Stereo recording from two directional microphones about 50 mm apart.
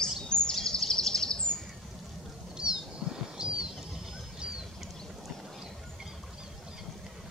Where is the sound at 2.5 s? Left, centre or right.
Centre.